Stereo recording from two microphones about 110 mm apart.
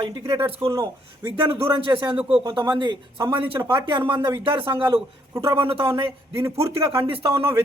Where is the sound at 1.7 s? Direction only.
50° right (ahead or behind).